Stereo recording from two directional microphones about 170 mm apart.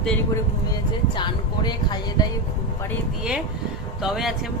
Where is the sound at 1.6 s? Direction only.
25° left (ahead or behind).